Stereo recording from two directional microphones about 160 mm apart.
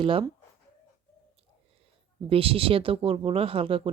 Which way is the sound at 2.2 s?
35° right (ahead or behind).